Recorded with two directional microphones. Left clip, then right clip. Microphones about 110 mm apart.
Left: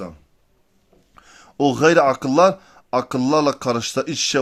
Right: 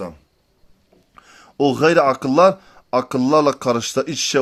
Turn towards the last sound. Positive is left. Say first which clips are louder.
# right 1 dB
turn(degrees=-15)  # may be behind; listen again after turning